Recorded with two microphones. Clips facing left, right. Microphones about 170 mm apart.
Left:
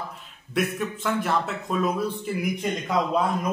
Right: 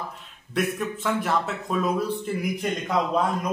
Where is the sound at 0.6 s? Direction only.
Centre (ahead or behind).